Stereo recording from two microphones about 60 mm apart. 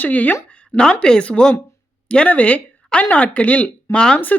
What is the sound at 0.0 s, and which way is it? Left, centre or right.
Speech, left.